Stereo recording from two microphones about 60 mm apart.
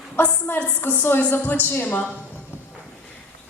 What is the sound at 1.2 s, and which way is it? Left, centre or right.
Speech, left.